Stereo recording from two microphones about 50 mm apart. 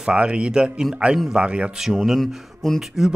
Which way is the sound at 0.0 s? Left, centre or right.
Right.